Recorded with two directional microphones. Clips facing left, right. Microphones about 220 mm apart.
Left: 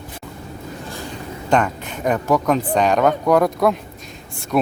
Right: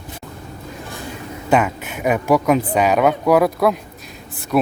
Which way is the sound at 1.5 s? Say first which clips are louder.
Right 1 dB; 5° right (ahead or behind).